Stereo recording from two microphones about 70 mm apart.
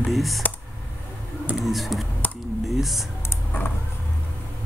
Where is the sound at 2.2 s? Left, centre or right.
Left.